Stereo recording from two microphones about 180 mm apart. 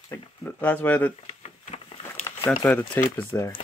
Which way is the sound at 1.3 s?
35° left (ahead or behind).